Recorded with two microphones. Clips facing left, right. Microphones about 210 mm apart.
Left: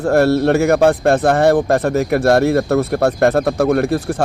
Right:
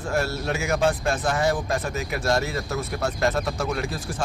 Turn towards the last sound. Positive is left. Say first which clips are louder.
# left 12 dB
turn(degrees=60)  # may be behind; listen again after turning